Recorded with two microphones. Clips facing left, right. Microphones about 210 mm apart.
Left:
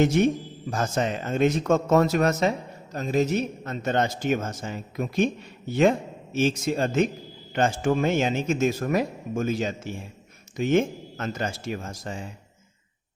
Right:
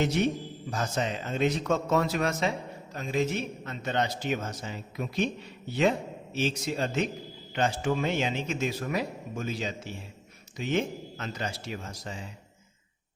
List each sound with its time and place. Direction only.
0.0 s a man's voice: 50° left (ahead or behind)